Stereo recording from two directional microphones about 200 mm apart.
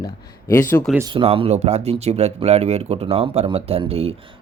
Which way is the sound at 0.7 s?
5° left (ahead or behind).